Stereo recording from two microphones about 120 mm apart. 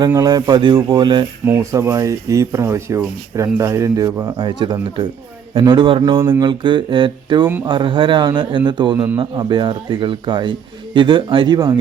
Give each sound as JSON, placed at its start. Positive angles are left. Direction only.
{"t": 0.0, "sound": "a man's voice", "side_deg": -30}
{"t": 1.5, "sound": "speech", "side_deg": -20}
{"t": 4.4, "sound": "a man's voice", "side_deg": -40}